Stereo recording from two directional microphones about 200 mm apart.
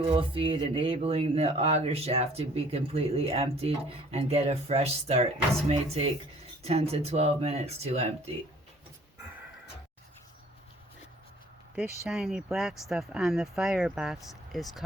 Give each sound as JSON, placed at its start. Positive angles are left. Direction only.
{"t": 0.1, "sound": "speech", "side_deg": -25}
{"t": 11.7, "sound": "speech", "side_deg": -5}